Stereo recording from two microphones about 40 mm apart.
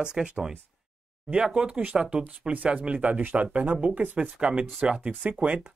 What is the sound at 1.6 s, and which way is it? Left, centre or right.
Speech, right.